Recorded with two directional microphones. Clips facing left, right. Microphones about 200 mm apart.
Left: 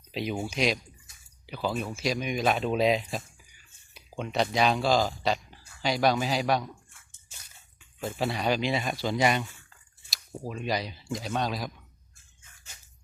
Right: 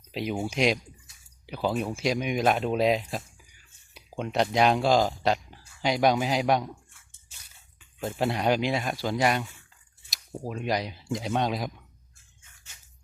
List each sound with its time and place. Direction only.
0.1 s speech: 5° right (ahead or behind)
8.0 s speech: 15° right (ahead or behind)
10.1 s speech: 15° right (ahead or behind)